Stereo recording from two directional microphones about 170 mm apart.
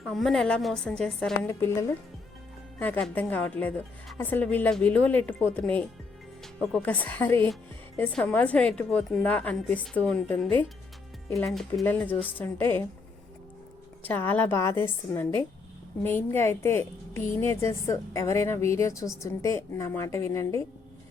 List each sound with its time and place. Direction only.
0.0 s a woman's voice: centre (ahead or behind)
1.5 s a woman's voice: 15° left (ahead or behind)
11.9 s a woman's voice: 10° left (ahead or behind)
14.1 s a woman's voice: 10° left (ahead or behind)